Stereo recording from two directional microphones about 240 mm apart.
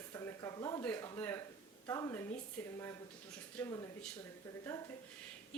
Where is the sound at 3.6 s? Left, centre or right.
Centre.